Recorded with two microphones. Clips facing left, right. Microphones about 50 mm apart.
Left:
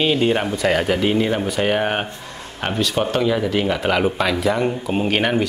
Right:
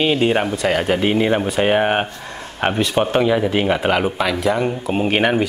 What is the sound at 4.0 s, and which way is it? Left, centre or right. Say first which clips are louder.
Speech: even; centre.